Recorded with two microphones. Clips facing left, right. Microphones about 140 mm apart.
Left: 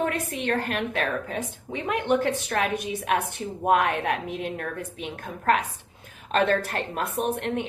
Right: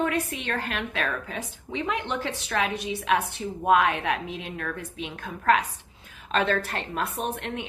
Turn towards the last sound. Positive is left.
turn(degrees=55)  # may be behind; listen again after turning